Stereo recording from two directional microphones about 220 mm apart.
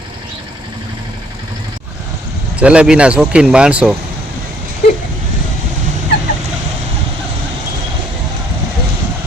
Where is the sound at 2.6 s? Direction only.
5° right (ahead or behind).